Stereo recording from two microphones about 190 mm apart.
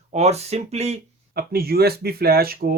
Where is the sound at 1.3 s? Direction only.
55° right (ahead or behind).